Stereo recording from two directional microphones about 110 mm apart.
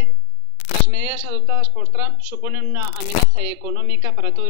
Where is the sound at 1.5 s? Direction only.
15° right (ahead or behind).